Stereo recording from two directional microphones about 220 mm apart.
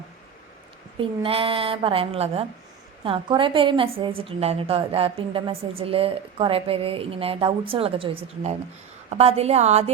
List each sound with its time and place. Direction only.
0.9 s a woman's voice: 25° right (ahead or behind)